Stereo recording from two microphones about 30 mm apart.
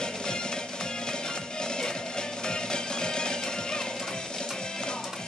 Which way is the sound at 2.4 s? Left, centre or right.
Left.